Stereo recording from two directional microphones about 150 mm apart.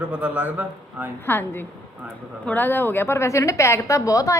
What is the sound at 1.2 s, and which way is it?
A woman's voice, 15° left (ahead or behind).